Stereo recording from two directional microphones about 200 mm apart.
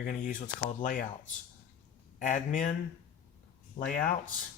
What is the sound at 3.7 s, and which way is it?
Speech, 45° left (ahead or behind).